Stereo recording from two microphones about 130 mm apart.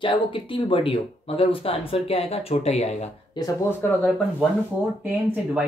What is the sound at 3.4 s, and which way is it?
Speech, 35° left (ahead or behind).